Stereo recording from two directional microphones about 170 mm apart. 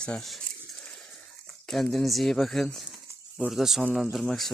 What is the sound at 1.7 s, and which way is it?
Speech, 5° left (ahead or behind).